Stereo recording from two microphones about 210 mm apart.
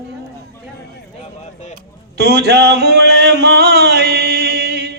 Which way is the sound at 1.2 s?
30° left (ahead or behind).